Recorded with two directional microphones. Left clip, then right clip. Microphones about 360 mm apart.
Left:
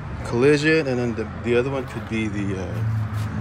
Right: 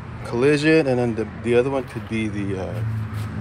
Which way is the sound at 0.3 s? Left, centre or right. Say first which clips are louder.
Even; centre.